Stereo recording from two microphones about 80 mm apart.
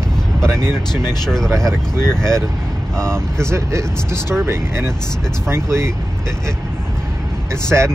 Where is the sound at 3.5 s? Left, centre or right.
Right.